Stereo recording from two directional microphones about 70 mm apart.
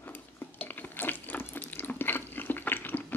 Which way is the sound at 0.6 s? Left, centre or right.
Left.